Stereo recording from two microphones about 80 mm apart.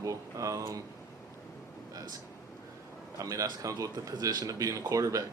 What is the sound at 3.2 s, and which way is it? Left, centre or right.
Speech, right.